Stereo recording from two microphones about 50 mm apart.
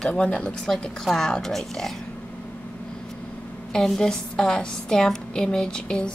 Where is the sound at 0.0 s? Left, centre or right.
Left.